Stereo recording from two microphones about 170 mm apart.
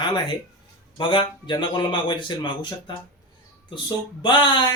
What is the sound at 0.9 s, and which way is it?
Speech, 30° left (ahead or behind).